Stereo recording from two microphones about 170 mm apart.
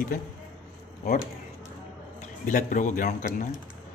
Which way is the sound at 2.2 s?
50° left (ahead or behind).